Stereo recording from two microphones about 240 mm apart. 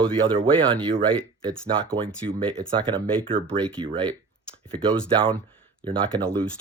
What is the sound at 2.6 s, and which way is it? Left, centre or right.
Speech, right.